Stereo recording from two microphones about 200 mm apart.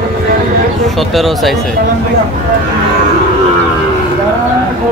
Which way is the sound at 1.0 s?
Centre (ahead or behind).